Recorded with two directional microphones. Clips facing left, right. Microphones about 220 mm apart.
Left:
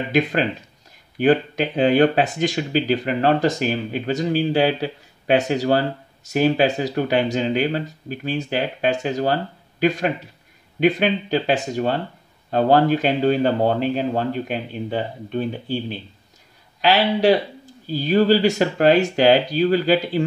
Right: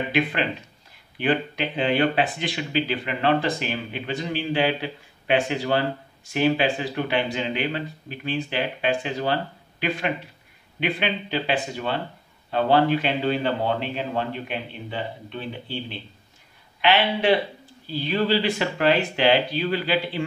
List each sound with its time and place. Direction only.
0.1 s speech: 40° left (ahead or behind)